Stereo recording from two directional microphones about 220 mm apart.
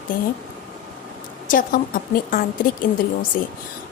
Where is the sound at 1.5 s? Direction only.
40° left (ahead or behind).